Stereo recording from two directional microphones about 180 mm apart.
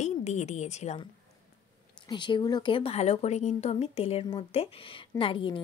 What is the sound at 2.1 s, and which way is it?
A woman's voice, 25° left (ahead or behind).